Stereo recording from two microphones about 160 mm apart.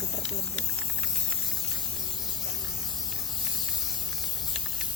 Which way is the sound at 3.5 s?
Centre (ahead or behind).